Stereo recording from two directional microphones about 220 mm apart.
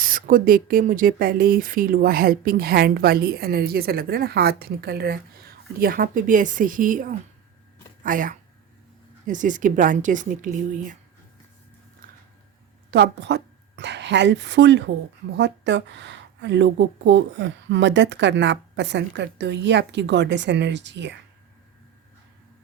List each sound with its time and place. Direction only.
0.0 s speech: 40° right (ahead or behind)
12.9 s a woman's voice: 50° right (ahead or behind)